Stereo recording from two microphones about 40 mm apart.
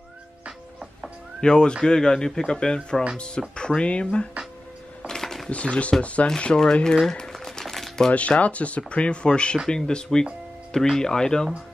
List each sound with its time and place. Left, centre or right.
1.4 s speech: left
5.0 s a sound: centre
5.5 s speech: left
6.2 s speech: left
7.1 s crumpling: centre
8.1 s speech: left; by 11.5 s centre